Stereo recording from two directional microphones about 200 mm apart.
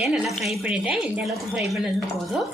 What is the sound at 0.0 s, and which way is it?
Speech, centre (ahead or behind).